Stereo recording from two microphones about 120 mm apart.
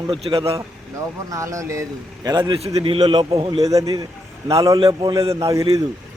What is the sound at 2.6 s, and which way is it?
Speech, 50° right (ahead or behind).